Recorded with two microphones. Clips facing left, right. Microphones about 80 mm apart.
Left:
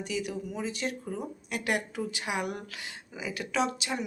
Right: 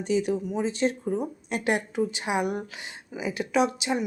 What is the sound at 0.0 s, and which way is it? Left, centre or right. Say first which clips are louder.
Speech: right 8 dB; right.